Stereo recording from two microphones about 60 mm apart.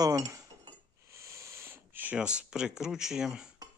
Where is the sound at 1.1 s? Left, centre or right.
Right.